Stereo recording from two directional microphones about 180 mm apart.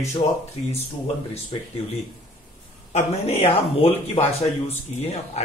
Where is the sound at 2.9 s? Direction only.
35° left (ahead or behind).